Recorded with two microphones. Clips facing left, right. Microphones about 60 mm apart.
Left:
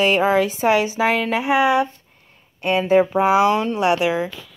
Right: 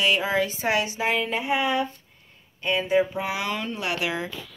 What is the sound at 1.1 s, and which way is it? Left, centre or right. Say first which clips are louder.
Speech: left 3 dB; left.